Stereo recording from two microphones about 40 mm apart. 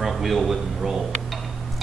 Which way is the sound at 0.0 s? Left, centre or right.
Centre.